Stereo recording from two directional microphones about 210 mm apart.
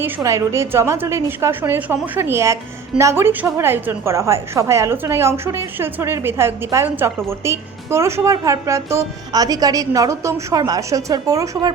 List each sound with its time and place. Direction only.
0.0 s a woman's voice: 15° right (ahead or behind)